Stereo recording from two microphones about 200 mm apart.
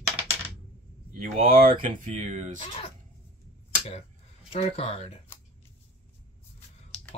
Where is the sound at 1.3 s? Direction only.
25° right (ahead or behind).